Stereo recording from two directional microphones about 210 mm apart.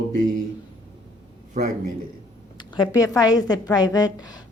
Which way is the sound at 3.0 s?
15° left (ahead or behind).